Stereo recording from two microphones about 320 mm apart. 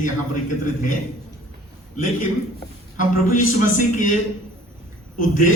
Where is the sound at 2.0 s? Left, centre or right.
Left.